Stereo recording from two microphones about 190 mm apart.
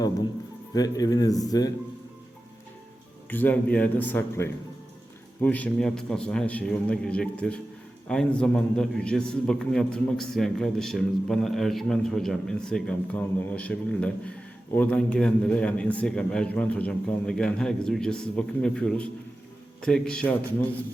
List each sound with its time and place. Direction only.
0.7 s speech: 20° left (ahead or behind)
3.2 s a man's voice: 10° left (ahead or behind)